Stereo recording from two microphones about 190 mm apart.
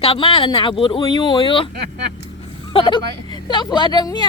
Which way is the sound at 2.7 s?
25° left (ahead or behind).